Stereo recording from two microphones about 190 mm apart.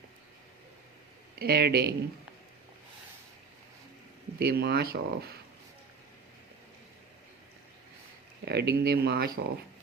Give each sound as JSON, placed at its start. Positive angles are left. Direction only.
{"t": 1.4, "sound": "speech", "side_deg": -55}
{"t": 4.4, "sound": "speech", "side_deg": -60}
{"t": 8.4, "sound": "speech", "side_deg": -60}